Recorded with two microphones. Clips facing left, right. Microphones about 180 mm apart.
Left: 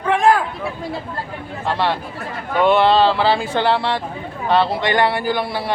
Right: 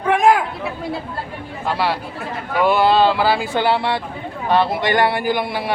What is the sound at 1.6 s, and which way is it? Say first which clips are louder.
Speech: even; 5° right (ahead or behind).